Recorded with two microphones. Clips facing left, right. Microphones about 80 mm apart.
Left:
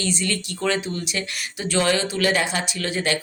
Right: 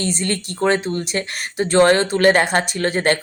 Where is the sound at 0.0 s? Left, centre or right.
Right.